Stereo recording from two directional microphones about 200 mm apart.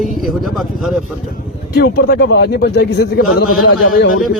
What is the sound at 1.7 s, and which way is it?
A man's voice, 55° left (ahead or behind).